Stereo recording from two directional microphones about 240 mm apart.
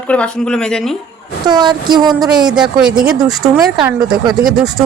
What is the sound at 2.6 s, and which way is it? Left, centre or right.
A woman's voice, centre.